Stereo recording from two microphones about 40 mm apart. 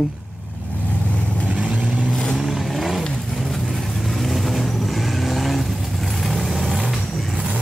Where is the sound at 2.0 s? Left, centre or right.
Centre.